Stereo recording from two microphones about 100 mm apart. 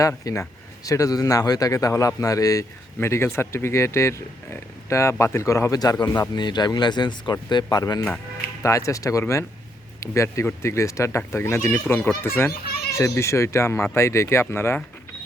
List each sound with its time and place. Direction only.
0.3 s a man's voice: 35° left (ahead or behind)
8.6 s a man's voice: 30° left (ahead or behind)